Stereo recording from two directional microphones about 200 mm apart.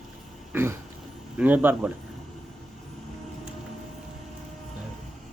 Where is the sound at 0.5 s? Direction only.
10° right (ahead or behind).